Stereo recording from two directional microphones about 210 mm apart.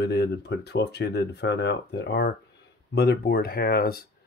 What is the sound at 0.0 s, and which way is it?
Speech, 50° left (ahead or behind).